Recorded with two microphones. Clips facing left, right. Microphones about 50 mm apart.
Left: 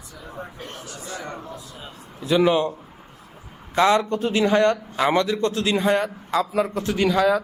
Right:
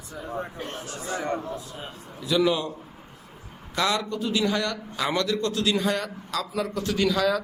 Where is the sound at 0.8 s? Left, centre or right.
Right.